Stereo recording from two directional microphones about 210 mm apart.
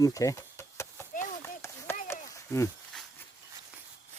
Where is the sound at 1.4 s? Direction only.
15° left (ahead or behind).